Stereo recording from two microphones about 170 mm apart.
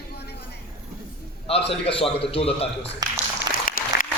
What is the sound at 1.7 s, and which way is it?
Speech, 35° left (ahead or behind).